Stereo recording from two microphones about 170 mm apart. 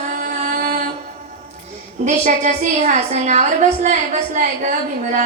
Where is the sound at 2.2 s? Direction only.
45° right (ahead or behind).